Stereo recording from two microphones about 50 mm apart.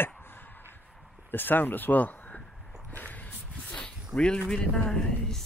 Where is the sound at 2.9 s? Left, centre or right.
Left.